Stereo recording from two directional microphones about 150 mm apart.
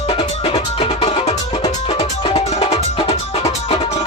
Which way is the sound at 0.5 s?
40° left (ahead or behind).